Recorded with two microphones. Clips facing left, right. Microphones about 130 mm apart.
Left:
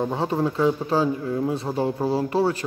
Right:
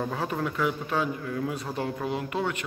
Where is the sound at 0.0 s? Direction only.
25° left (ahead or behind).